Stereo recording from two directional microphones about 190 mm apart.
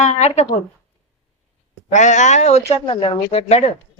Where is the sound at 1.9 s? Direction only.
40° left (ahead or behind).